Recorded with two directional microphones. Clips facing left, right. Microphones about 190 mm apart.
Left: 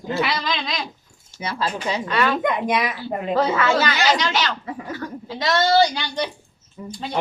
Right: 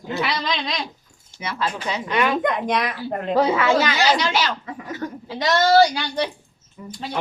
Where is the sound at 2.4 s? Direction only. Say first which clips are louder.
Even; 5° left (ahead or behind).